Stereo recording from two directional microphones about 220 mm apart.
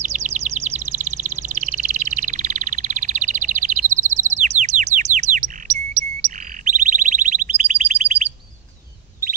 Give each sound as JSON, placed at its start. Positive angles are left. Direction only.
{"t": 0.0, "sound": "bird", "side_deg": -30}